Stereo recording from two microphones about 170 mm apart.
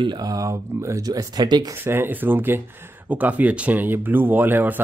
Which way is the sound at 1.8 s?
10° right (ahead or behind).